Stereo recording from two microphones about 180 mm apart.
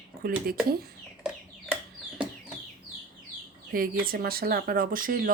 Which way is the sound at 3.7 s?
55° right (ahead or behind).